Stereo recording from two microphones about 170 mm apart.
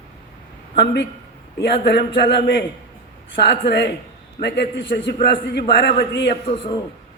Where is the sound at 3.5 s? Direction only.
85° left.